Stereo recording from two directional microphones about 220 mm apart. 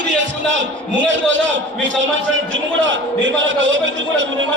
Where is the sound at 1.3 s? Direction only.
55° right (ahead or behind).